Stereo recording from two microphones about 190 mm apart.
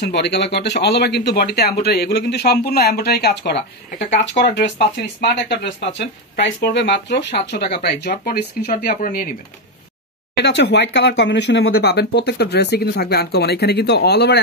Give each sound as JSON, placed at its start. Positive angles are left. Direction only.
{"t": 0.1, "sound": "speech", "side_deg": 65}
{"t": 10.3, "sound": "speech", "side_deg": 65}